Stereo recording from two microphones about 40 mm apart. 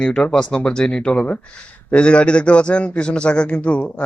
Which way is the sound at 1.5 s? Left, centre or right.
Left.